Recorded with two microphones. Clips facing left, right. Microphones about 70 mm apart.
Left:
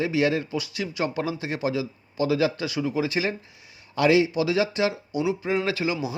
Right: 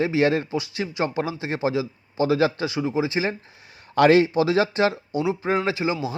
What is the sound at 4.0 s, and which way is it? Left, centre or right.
Speech, right.